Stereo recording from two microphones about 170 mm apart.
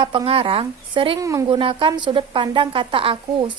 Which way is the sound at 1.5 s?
30° right (ahead or behind).